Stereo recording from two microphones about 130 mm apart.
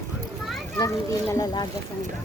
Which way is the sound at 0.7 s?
25° left (ahead or behind).